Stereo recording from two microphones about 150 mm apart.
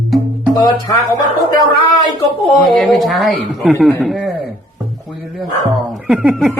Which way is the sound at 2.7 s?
5° left (ahead or behind).